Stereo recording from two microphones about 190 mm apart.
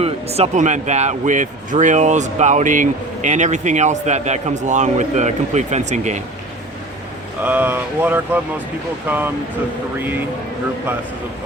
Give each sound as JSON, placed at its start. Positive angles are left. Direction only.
{"t": 0.0, "sound": "speech", "side_deg": -30}
{"t": 7.4, "sound": "speech", "side_deg": -10}